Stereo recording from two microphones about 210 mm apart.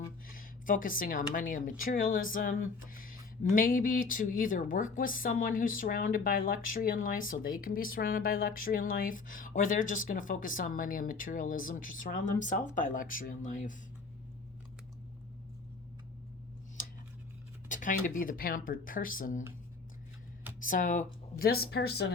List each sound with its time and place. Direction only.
0.3 s speech: 40° left (ahead or behind)
16.8 s scissors: 40° left (ahead or behind)
17.7 s speech: 40° left (ahead or behind)
20.6 s speech: 40° left (ahead or behind)